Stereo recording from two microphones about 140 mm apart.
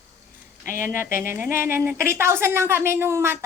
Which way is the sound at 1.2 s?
15° right (ahead or behind).